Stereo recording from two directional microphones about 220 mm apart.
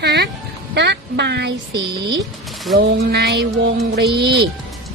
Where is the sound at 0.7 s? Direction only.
50° right (ahead or behind).